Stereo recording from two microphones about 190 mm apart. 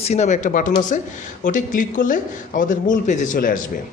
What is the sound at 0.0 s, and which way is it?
A man's voice, 35° left (ahead or behind).